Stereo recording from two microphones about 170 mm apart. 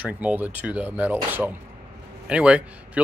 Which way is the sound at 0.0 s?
10° right (ahead or behind).